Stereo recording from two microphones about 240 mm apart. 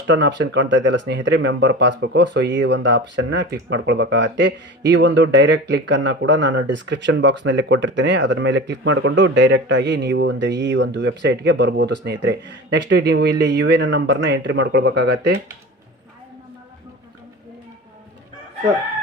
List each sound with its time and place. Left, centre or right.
0.1 s speech: right